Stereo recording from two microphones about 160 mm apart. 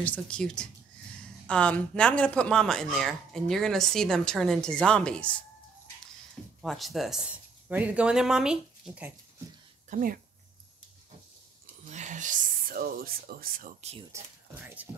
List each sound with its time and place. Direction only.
0.0 s speech: 10° left (ahead or behind)
6.6 s speech: centre (ahead or behind)
9.8 s speech: 60° right (ahead or behind)
11.8 s a sound: 50° right (ahead or behind)
13.7 s speech: 40° right (ahead or behind)
14.1 s speech: 15° right (ahead or behind)